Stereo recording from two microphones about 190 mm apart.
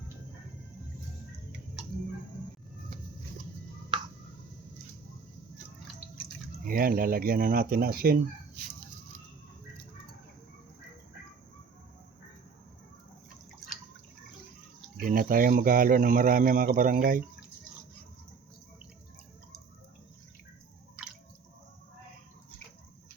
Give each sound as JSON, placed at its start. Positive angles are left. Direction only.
{"t": 6.7, "sound": "speech", "side_deg": -50}
{"t": 15.0, "sound": "speech", "side_deg": -50}